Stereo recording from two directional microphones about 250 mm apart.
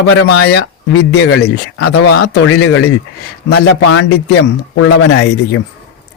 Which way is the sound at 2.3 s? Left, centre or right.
Left.